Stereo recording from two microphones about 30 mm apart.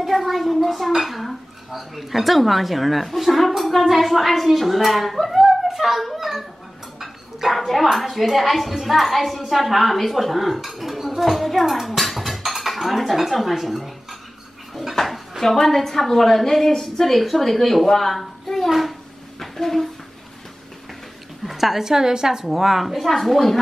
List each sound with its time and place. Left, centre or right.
0.0 s dishes: centre
3.9 s a woman's voice: centre
7.4 s dishes: centre
12.0 s music: centre
12.8 s dishes: centre
15.4 s a woman's voice: centre
21.5 s a woman's voice: centre
21.8 s a woman's voice: centre
22.5 s dishes: centre
23.0 s a woman's voice: centre